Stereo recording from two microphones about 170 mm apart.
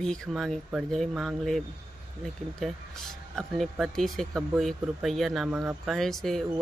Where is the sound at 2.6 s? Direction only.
Centre (ahead or behind).